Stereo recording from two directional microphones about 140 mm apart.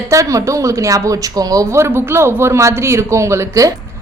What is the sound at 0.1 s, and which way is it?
A woman's voice, 25° right (ahead or behind).